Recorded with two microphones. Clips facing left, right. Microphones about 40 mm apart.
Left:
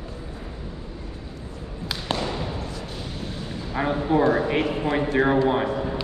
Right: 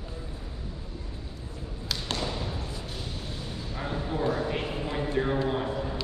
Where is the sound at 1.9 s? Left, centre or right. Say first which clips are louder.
Left 5 dB; centre.